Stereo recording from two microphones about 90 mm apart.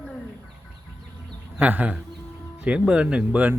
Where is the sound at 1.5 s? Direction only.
20° right (ahead or behind).